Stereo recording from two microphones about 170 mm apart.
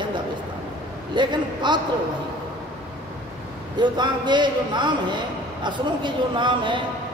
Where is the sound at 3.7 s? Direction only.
25° right (ahead or behind).